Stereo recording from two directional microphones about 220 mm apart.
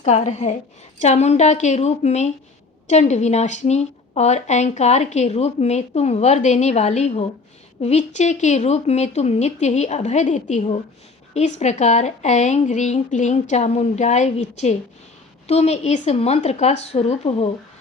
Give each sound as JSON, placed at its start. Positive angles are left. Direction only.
{"t": 0.0, "sound": "a woman's voice", "side_deg": 30}